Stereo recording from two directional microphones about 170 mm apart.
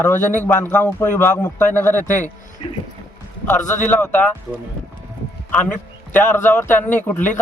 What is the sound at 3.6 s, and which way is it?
Speech, 45° left (ahead or behind).